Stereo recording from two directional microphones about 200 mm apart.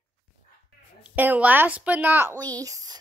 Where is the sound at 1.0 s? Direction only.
10° right (ahead or behind).